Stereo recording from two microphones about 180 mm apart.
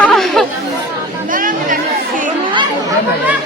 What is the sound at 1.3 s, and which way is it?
Chatter, 50° right (ahead or behind).